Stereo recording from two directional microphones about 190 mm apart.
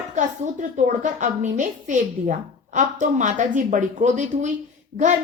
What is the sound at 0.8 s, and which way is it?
A woman's voice, 40° right (ahead or behind).